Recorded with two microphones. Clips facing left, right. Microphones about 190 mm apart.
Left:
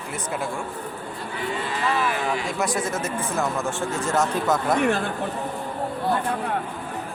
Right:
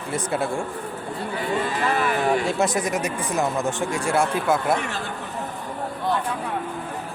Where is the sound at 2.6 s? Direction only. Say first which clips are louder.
Right 3 dB; 20° right (ahead or behind).